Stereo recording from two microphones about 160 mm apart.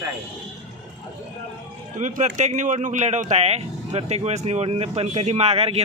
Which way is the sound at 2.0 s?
50° right (ahead or behind).